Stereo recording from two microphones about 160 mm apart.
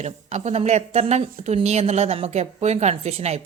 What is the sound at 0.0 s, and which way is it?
Speech, 45° right (ahead or behind).